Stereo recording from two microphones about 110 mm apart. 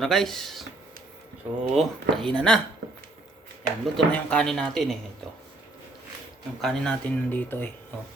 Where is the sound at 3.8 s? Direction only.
10° left (ahead or behind).